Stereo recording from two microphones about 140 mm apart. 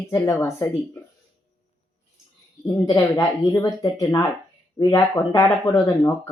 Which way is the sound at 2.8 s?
25° left (ahead or behind).